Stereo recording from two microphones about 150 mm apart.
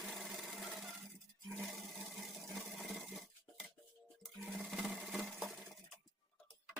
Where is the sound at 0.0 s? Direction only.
Centre (ahead or behind).